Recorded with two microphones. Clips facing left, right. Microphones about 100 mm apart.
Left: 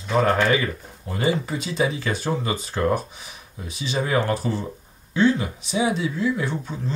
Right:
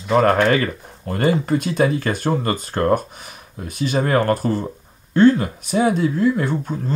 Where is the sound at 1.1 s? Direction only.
60° right (ahead or behind).